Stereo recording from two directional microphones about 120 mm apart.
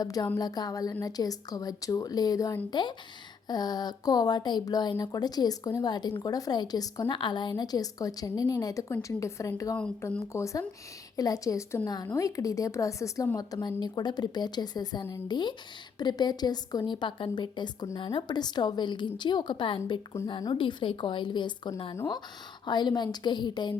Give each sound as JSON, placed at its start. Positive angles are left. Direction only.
{"t": 0.0, "sound": "a woman's voice", "side_deg": 30}